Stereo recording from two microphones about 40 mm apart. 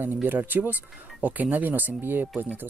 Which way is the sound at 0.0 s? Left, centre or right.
Right.